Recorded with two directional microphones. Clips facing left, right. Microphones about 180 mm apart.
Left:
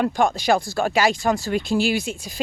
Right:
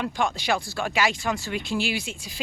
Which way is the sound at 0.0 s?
45° left (ahead or behind).